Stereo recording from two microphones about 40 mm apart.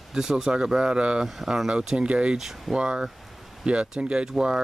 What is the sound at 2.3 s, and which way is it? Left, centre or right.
Speech, centre.